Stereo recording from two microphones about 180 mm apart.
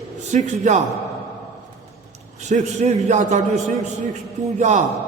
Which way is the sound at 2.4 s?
40° right (ahead or behind).